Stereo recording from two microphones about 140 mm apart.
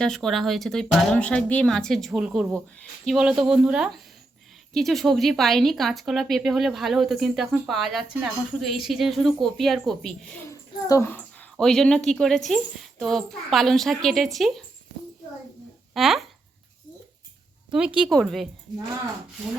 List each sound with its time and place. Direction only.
0.0 s speech: 5° left (ahead or behind)
10.5 s a sound: 25° left (ahead or behind)
11.5 s speech: 5° left (ahead or behind)
16.0 s speech: centre (ahead or behind)
17.7 s speech: 5° right (ahead or behind)